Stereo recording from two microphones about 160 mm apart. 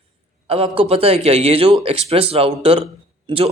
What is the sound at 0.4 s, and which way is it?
A man's voice, 35° right (ahead or behind).